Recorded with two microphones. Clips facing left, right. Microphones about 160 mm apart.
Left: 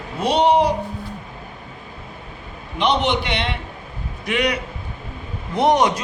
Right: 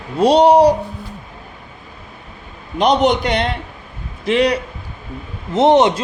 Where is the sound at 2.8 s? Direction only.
40° right (ahead or behind); by 5.9 s 25° right (ahead or behind).